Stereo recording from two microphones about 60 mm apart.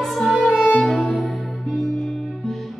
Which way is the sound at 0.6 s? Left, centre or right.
Centre.